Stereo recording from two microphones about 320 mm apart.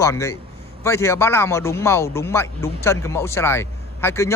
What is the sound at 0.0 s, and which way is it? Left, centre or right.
Speech, centre.